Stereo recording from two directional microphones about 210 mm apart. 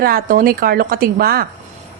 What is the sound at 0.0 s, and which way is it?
A woman's voice, 45° right (ahead or behind).